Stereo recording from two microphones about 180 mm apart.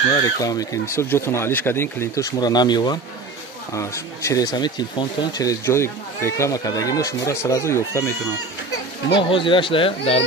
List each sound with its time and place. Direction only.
0.2 s speech: 20° left (ahead or behind)
9.1 s speech: 30° left (ahead or behind)